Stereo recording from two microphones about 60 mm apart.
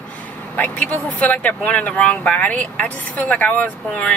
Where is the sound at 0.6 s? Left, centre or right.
Left.